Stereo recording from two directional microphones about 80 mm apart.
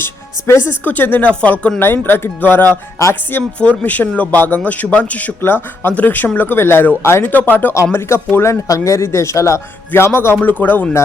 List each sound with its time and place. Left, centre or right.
0.0 s speech: left; by 1.8 s centre
1.8 s a man's voice: left
3.6 s a man's voice: centre